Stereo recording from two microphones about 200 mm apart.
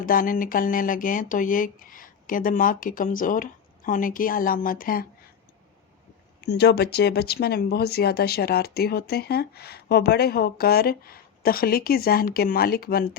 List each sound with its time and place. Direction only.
0.0 s speech: 45° left (ahead or behind)
6.4 s speech: 55° left (ahead or behind)